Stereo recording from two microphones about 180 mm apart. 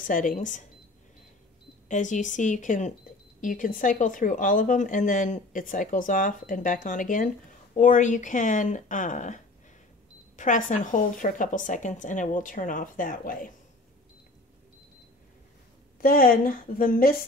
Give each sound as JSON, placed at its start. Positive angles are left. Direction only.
{"t": 0.0, "sound": "speech", "side_deg": 50}
{"t": 1.9, "sound": "speech", "side_deg": 45}
{"t": 16.0, "sound": "speech", "side_deg": 55}